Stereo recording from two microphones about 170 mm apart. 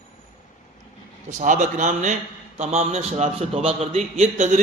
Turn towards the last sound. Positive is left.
turn(degrees=-45)  # may be behind; listen again after turning